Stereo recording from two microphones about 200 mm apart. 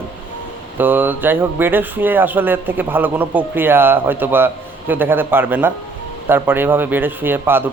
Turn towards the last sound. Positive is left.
turn(degrees=-10)  # may be behind; listen again after turning